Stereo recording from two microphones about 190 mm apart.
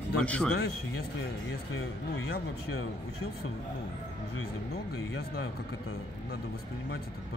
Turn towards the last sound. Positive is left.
turn(degrees=55)  # may be behind; listen again after turning